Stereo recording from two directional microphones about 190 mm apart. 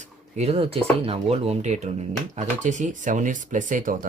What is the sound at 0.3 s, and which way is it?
Speech, 35° right (ahead or behind).